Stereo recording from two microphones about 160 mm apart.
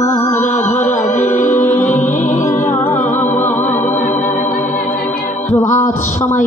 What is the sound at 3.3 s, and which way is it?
Music, 10° left (ahead or behind).